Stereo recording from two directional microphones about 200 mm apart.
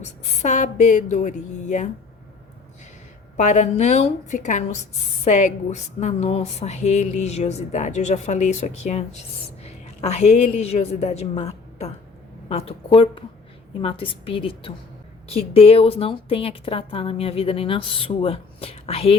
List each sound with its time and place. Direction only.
0.0 s a woman's voice: 35° left (ahead or behind)
3.3 s a woman's voice: 35° left (ahead or behind)